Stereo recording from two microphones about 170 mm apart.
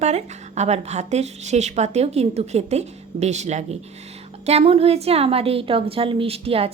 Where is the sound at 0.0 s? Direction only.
40° right (ahead or behind).